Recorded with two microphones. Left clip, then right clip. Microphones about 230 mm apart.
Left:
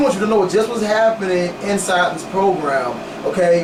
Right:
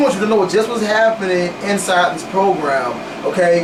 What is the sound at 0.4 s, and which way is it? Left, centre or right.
Speech, centre.